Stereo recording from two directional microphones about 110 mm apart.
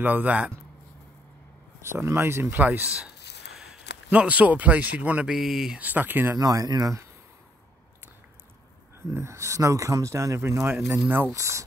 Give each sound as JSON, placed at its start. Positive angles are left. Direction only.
{"t": 0.0, "sound": "speech", "side_deg": -15}
{"t": 1.8, "sound": "speech", "side_deg": -25}
{"t": 4.1, "sound": "speech", "side_deg": -15}
{"t": 6.3, "sound": "speech", "side_deg": -30}
{"t": 9.1, "sound": "speech", "side_deg": -25}